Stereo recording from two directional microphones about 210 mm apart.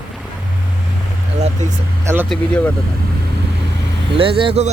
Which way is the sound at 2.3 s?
5° left (ahead or behind).